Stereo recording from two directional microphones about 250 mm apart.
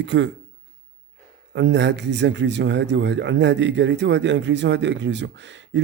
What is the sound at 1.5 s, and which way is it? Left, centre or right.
Speech, right.